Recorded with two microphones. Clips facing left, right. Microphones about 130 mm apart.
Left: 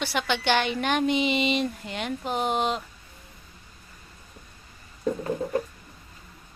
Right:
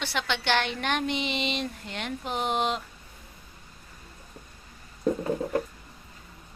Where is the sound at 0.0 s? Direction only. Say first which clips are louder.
Left 3 dB; 5° left (ahead or behind).